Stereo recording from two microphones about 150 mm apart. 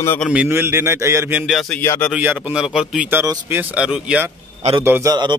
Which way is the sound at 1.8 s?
10° left (ahead or behind).